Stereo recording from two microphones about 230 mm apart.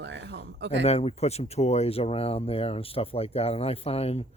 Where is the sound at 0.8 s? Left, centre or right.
Left.